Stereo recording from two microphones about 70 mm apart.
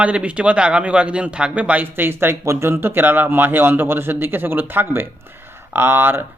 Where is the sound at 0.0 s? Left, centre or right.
Centre.